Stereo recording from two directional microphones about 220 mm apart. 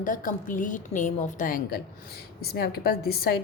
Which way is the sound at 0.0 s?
35° left (ahead or behind).